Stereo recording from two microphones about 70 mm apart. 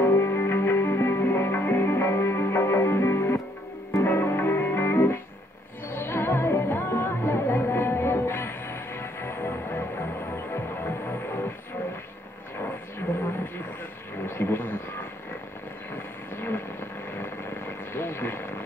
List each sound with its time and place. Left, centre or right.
0.0 s music: left
12.5 s a sound: left
15.9 s vehicle: left